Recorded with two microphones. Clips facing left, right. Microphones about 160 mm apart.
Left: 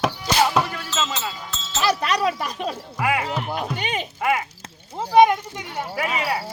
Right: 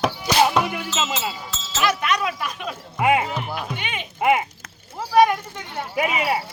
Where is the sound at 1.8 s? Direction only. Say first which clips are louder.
Left 1 dB; 35° left (ahead or behind).